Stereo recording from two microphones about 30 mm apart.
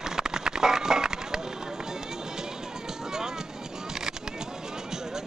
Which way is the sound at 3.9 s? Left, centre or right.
Right.